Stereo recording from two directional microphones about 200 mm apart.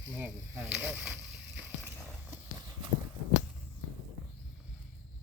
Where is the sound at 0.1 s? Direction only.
10° right (ahead or behind).